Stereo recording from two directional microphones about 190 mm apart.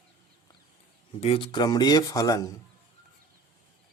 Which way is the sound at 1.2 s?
30° left (ahead or behind).